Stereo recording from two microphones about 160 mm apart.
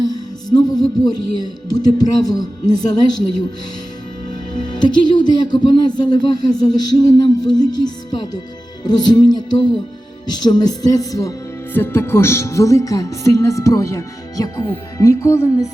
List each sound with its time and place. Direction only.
0.0 s music: 25° left (ahead or behind)
4.8 s music: 25° left (ahead or behind)